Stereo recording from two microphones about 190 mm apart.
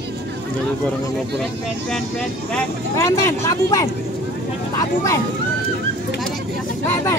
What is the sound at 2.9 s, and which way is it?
Speech, 15° left (ahead or behind).